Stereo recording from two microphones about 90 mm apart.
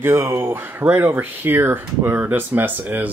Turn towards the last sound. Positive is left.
turn(degrees=-20)  # may be behind; listen again after turning